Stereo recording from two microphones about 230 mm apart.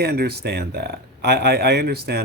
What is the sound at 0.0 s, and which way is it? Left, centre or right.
Speech, right.